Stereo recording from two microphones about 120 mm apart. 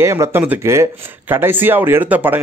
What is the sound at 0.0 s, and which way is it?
Speech, 20° right (ahead or behind).